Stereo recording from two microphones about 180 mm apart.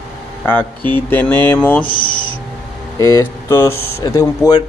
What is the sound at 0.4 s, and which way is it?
Speech, 10° left (ahead or behind).